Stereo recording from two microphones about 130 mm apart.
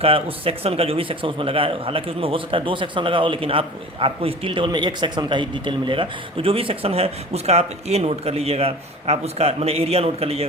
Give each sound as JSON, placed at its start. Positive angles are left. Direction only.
{"t": 0.0, "sound": "a man's voice", "side_deg": -45}